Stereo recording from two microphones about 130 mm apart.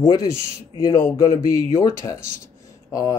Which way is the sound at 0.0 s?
30° left (ahead or behind).